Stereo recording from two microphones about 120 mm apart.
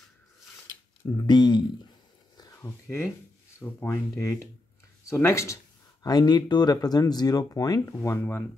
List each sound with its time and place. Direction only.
1.0 s speech: 35° left (ahead or behind)
2.3 s a sound: 30° left (ahead or behind)
3.5 s speech: 20° left (ahead or behind)
5.0 s speech: 25° left (ahead or behind)
6.0 s speech: 35° left (ahead or behind)